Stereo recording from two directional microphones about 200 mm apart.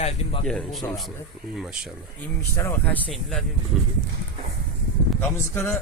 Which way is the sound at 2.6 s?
10° left (ahead or behind).